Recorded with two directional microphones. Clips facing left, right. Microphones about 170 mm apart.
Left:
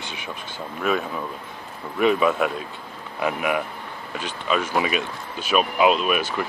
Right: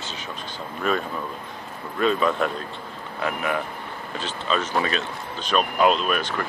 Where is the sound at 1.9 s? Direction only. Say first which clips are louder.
Left 2 dB; 15° left (ahead or behind).